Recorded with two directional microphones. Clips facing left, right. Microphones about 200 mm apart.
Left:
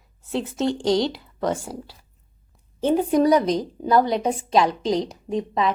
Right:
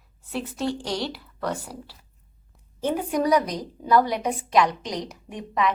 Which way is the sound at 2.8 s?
25° left (ahead or behind).